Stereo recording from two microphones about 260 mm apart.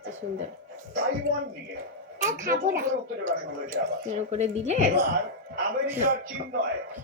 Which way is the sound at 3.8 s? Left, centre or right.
Right.